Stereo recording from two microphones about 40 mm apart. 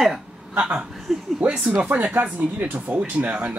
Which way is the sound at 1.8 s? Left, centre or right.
Right.